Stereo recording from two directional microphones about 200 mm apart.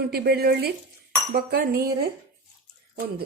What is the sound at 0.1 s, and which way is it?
Speech, 50° right (ahead or behind).